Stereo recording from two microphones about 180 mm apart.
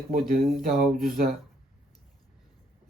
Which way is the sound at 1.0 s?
55° right (ahead or behind).